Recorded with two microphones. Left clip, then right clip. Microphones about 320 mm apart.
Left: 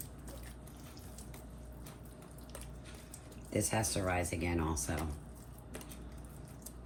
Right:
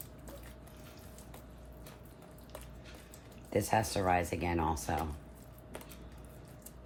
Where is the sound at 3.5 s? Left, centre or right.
Right.